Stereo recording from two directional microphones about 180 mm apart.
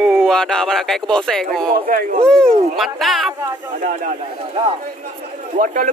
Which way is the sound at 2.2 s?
5° left (ahead or behind).